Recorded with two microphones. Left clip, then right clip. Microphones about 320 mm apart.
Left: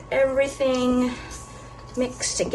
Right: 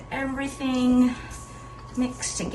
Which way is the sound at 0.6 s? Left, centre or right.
Left.